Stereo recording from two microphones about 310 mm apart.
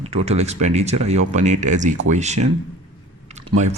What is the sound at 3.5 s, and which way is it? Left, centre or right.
Speech, right.